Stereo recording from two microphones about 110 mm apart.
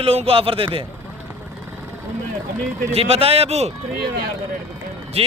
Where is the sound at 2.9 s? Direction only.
65° right (ahead or behind).